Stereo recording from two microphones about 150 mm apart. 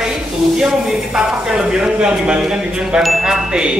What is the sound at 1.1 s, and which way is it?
Speech, 5° right (ahead or behind).